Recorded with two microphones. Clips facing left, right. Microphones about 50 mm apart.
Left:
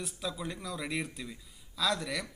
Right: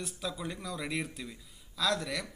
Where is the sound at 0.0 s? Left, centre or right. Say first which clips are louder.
Even; centre.